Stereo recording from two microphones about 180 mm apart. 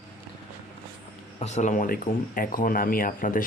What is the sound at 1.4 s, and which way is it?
Speech, 40° left (ahead or behind).